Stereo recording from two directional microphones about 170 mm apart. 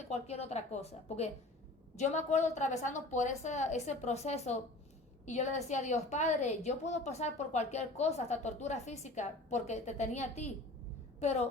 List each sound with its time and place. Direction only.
0.1 s a woman's voice: 40° left (ahead or behind)